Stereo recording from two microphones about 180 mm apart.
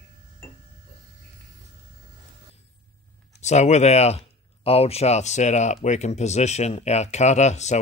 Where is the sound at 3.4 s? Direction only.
40° left (ahead or behind).